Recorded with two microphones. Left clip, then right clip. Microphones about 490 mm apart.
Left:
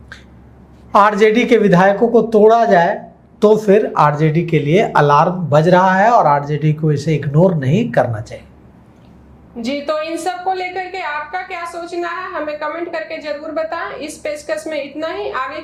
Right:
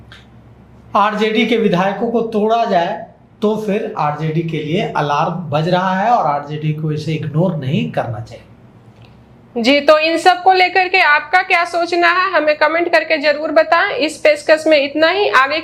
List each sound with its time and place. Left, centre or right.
0.9 s speech: left
9.6 s a woman's voice: right